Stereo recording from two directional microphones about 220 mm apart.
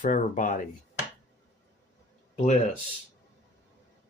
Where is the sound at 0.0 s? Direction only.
35° left (ahead or behind).